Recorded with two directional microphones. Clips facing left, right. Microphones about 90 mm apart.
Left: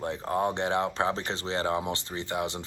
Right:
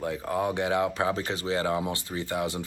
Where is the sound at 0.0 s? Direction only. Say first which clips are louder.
Even; 30° left (ahead or behind).